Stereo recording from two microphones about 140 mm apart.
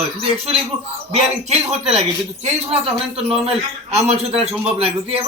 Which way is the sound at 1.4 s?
50° right (ahead or behind).